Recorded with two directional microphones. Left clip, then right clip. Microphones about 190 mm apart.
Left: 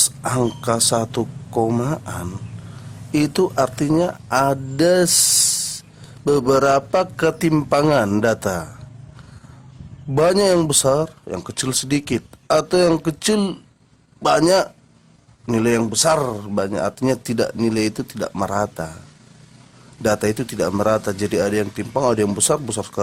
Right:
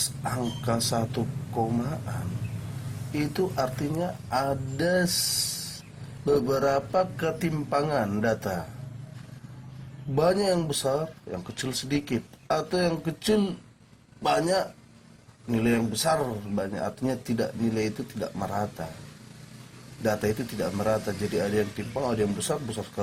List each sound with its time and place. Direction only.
0.2 s speech: 35° left (ahead or behind)
3.1 s speech: 40° left (ahead or behind)
4.3 s music: 40° left (ahead or behind)
6.5 s speech: 45° left (ahead or behind)
10.2 s speech: 40° left (ahead or behind)
20.0 s speech: 40° left (ahead or behind)